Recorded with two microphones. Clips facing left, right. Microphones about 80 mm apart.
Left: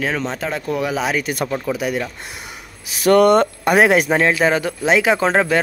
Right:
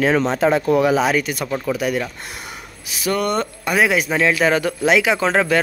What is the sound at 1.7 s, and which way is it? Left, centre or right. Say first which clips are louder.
Speech: right 3 dB; centre.